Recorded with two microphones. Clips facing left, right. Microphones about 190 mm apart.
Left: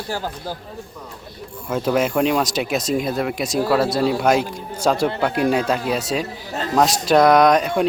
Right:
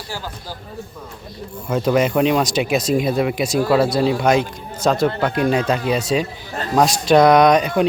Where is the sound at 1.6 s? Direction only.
Centre (ahead or behind).